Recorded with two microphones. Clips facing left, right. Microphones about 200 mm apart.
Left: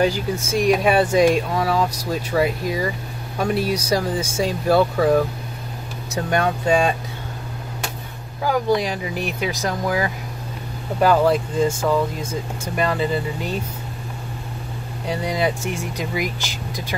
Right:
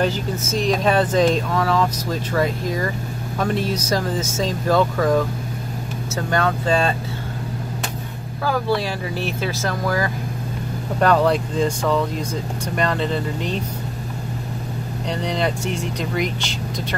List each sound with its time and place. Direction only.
0.0 s speech: 10° left (ahead or behind)
6.1 s speech: 15° left (ahead or behind)
8.5 s speech: 15° left (ahead or behind)
11.0 s speech: 5° left (ahead or behind)
15.0 s speech: 5° left (ahead or behind)